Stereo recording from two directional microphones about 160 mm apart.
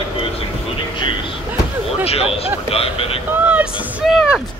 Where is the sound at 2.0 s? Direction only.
40° left (ahead or behind).